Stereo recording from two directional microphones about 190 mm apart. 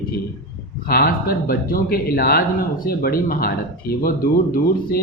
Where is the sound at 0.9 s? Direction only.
50° left (ahead or behind).